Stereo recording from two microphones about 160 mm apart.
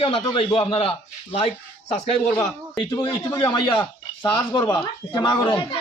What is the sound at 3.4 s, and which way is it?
Speech, 30° left (ahead or behind).